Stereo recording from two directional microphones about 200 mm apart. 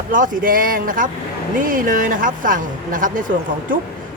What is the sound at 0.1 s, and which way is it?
Speech, 40° right (ahead or behind).